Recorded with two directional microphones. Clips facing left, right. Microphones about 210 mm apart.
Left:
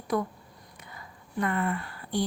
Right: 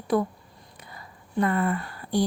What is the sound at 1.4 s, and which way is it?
Speech, 35° right (ahead or behind).